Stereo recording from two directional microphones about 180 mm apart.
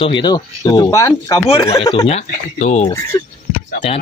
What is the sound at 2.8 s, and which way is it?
Speech, 15° left (ahead or behind).